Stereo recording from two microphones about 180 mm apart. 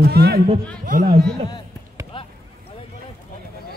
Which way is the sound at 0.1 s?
60° right (ahead or behind).